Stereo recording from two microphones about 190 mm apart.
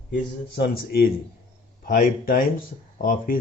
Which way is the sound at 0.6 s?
55° left (ahead or behind).